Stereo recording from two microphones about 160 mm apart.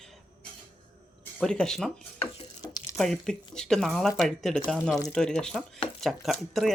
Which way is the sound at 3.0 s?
5° left (ahead or behind).